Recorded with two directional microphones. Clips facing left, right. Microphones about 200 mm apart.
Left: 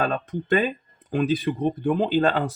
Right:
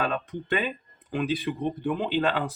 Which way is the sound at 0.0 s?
45° left (ahead or behind).